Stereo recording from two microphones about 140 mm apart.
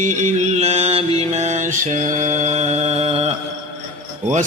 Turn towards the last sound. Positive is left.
turn(degrees=-45)  # may be behind; listen again after turning